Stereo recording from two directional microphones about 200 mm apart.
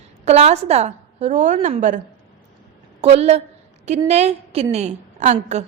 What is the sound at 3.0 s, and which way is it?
A woman's voice, 35° right (ahead or behind).